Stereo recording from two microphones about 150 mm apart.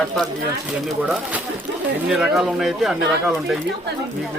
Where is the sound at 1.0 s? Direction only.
10° right (ahead or behind).